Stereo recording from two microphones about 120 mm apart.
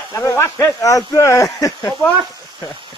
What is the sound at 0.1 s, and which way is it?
Speech, 20° left (ahead or behind).